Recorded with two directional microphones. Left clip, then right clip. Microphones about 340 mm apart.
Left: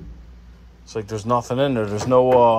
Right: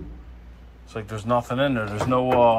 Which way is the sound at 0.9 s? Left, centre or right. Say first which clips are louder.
Left 3 dB; centre.